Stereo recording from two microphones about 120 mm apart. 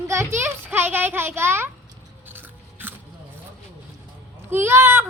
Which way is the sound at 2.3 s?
15° right (ahead or behind).